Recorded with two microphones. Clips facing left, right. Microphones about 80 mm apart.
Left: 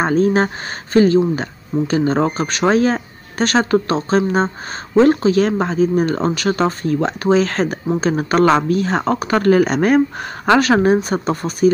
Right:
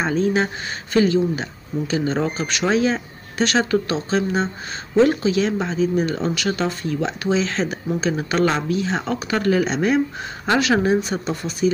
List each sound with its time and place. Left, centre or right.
0.0 s speech: left
10.6 s speech: left